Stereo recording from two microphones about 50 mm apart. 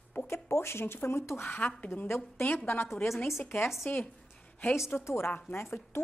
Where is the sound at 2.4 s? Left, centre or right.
Left.